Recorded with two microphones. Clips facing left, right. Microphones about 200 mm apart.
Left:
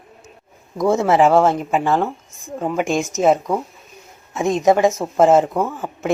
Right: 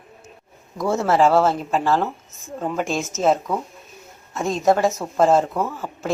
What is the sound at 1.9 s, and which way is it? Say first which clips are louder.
Speech: left 2 dB; 10° left (ahead or behind).